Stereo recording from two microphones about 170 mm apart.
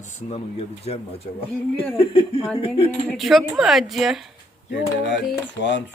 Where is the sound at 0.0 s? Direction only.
40° left (ahead or behind).